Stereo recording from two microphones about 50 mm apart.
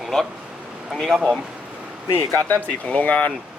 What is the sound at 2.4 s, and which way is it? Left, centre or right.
Speech, left.